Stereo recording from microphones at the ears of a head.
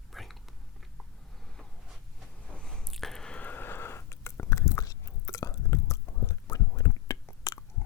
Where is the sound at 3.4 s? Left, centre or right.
Left.